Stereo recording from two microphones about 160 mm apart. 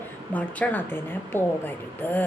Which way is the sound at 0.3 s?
10° left (ahead or behind).